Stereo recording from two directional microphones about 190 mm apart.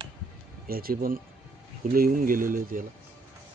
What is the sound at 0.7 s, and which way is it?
Speech, 50° right (ahead or behind).